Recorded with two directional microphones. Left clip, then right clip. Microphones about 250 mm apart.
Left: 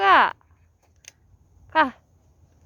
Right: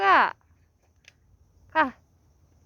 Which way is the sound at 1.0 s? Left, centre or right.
Left.